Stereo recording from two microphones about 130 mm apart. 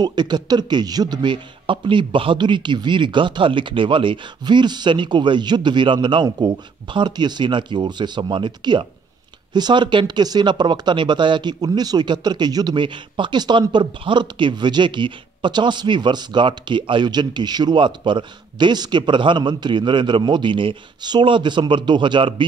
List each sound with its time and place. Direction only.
0.0 s speech: 35° right (ahead or behind)